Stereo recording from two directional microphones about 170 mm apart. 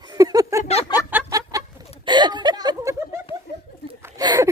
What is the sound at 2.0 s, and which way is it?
Speech, 25° right (ahead or behind).